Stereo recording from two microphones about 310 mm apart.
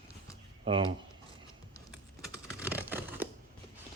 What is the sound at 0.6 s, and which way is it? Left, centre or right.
Speech, centre.